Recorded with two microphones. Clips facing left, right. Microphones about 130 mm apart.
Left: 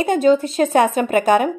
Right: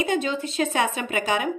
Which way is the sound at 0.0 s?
45° left (ahead or behind).